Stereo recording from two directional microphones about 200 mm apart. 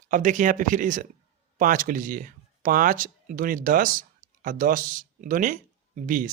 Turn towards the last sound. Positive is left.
turn(degrees=-40)  # may be behind; listen again after turning